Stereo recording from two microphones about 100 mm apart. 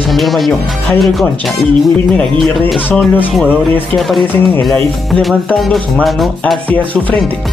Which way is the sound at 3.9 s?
Centre (ahead or behind).